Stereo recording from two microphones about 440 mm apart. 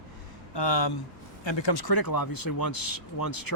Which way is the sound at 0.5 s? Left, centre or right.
Left.